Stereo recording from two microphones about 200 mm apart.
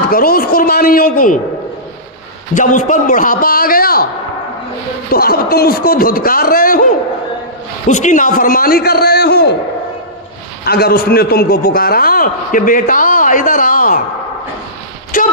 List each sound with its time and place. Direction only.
0.1 s a man's voice: 45° left (ahead or behind)
2.5 s a man's voice: 40° left (ahead or behind)
5.1 s a man's voice: 50° left (ahead or behind)
7.9 s a man's voice: 40° left (ahead or behind)
10.6 s a man's voice: 50° left (ahead or behind)